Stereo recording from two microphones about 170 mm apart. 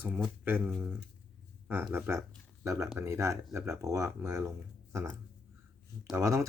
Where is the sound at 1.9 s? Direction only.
15° right (ahead or behind).